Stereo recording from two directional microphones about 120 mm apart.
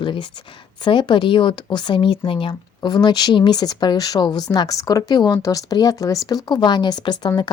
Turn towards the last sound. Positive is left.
turn(degrees=35)  # may be behind; listen again after turning